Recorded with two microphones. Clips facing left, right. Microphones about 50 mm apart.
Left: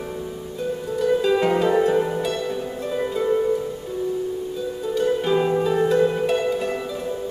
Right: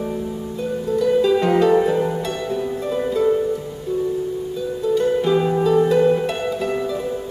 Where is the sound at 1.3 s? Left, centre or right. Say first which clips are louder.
Right 2 dB; centre.